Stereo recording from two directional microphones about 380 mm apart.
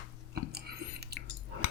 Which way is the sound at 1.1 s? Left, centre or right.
Right.